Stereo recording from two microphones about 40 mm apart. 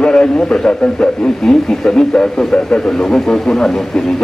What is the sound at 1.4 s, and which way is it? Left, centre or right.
A man's voice, centre.